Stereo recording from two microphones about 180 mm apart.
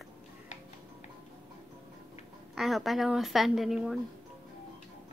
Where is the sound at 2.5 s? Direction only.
Centre (ahead or behind).